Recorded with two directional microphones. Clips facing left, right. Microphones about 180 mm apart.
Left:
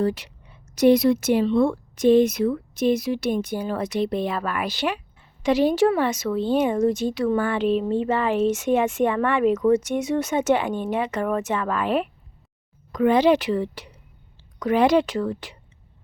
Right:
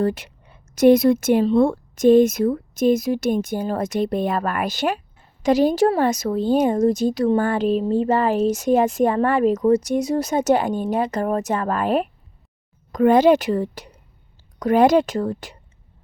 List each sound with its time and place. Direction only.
0.0 s a woman's voice: 50° right (ahead or behind)